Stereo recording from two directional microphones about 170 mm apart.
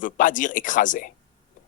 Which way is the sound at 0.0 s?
50° left (ahead or behind).